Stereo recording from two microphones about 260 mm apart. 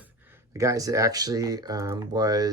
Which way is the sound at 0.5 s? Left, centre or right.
Centre.